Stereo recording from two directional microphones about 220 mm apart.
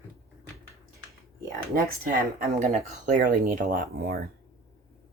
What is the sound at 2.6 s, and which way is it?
Speech, 35° right (ahead or behind).